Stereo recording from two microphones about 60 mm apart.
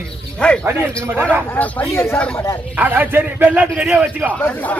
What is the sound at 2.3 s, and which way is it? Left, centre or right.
Speech, left.